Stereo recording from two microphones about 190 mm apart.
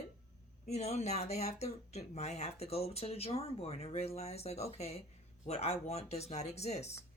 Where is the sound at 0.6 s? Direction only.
35° left (ahead or behind).